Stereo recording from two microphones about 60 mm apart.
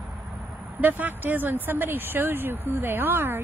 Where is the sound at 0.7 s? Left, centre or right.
Right.